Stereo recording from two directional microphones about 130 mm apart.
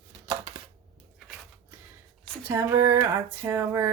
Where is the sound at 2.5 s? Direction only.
20° right (ahead or behind).